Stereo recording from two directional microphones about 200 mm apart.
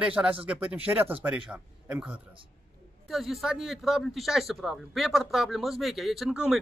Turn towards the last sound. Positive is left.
turn(degrees=-5)  # may be behind; listen again after turning